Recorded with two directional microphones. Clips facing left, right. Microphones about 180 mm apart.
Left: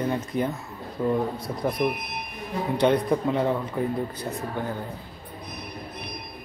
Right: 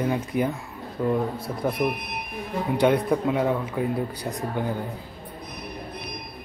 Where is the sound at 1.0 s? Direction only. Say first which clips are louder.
Even; centre (ahead or behind); by 4.7 s 15° right (ahead or behind).